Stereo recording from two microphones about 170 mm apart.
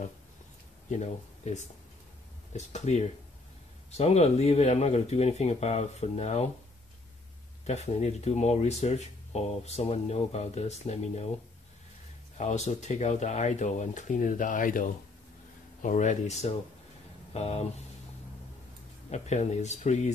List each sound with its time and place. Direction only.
0.8 s speech: 45° left (ahead or behind)
7.6 s speech: 40° left (ahead or behind)
12.4 s speech: 40° left (ahead or behind)
19.0 s speech: 40° left (ahead or behind)